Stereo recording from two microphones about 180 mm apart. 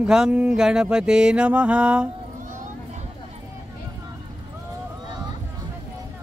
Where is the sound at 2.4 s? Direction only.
45° right (ahead or behind).